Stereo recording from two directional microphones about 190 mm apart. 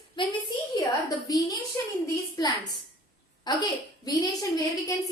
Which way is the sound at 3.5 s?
20° left (ahead or behind).